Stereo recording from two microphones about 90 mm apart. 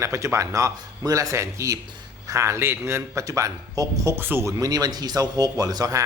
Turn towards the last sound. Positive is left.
turn(degrees=-40)  # may be behind; listen again after turning